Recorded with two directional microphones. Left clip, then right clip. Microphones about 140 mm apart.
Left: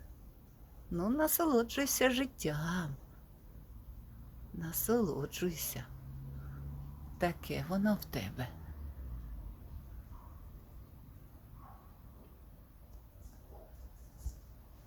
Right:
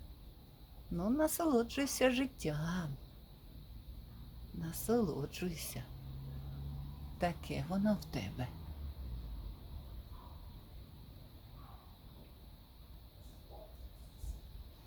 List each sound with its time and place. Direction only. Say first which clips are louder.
0.9 s speech: left 2 dB; 45° left (ahead or behind)
4.6 s speech: left 2 dB; 45° left (ahead or behind)
7.2 s speech: left 2 dB; 50° left (ahead or behind)